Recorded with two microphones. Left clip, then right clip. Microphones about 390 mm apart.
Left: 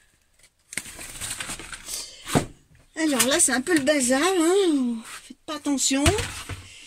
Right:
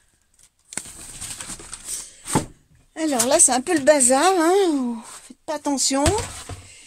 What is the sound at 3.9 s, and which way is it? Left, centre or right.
Speech, right.